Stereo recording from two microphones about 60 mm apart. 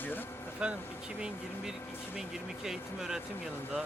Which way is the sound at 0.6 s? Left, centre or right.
Centre.